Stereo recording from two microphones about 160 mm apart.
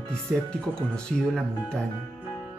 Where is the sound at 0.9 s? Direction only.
5° left (ahead or behind).